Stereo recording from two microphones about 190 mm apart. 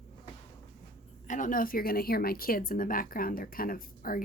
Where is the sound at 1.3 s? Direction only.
45° left (ahead or behind).